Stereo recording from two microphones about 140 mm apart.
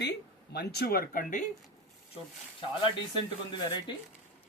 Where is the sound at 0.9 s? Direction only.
85° left.